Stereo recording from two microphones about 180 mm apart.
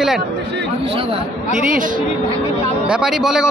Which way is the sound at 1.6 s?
45° right (ahead or behind).